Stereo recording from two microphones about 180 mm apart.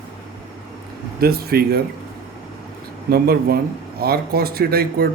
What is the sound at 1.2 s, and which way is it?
Speech, 60° right (ahead or behind).